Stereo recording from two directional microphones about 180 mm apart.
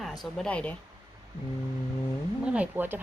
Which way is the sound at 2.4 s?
5° right (ahead or behind).